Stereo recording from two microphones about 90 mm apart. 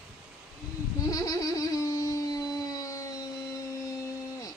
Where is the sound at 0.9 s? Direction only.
40° left (ahead or behind).